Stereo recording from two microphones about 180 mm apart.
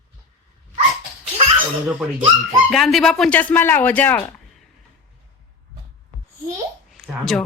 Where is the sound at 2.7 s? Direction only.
Centre (ahead or behind).